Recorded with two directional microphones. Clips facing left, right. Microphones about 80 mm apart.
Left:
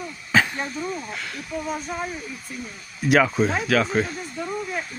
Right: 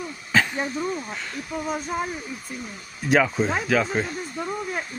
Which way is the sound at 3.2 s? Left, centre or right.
Centre.